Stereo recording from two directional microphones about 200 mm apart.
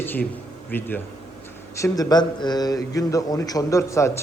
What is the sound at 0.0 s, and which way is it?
A man's voice, 10° left (ahead or behind).